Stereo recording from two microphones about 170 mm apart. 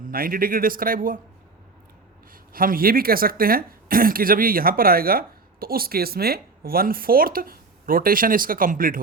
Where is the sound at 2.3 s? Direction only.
55° right (ahead or behind).